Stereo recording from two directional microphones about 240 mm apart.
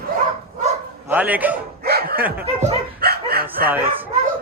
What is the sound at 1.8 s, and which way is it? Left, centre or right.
Dog, right.